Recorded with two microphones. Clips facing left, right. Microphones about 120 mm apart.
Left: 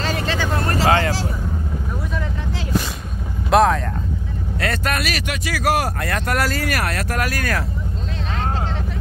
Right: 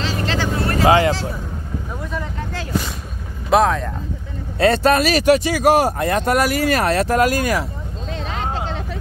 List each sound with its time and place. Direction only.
0.8 s speech: 20° right (ahead or behind)
3.4 s vehicle: centre (ahead or behind)
4.6 s speech: 30° right (ahead or behind)
5.5 s speech: 25° right (ahead or behind)